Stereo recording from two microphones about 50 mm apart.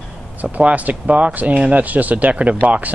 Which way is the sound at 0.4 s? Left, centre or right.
Right.